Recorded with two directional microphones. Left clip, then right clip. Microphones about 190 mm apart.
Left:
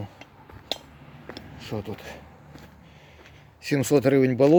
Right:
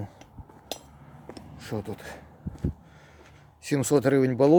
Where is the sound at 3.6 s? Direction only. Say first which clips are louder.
Left 2 dB; 5° left (ahead or behind).